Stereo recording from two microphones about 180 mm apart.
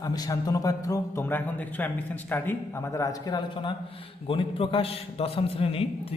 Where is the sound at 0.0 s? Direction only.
20° left (ahead or behind).